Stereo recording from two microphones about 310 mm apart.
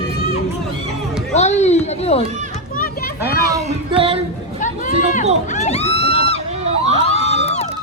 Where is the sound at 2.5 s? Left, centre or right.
Left.